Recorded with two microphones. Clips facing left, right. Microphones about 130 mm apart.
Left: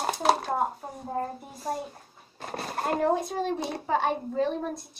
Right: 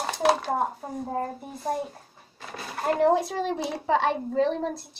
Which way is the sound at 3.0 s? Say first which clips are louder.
Right 5 dB; 85° right.